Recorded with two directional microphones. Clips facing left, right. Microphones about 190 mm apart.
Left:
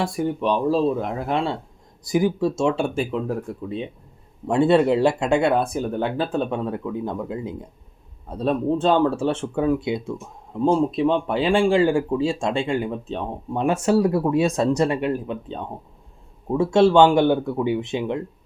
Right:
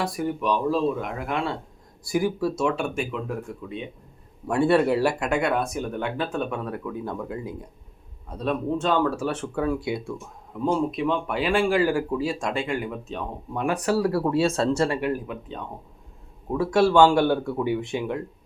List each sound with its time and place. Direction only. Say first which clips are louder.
0.0 s speech: left 3 dB; 25° left (ahead or behind)
4.4 s speech: left 3 dB; 20° left (ahead or behind)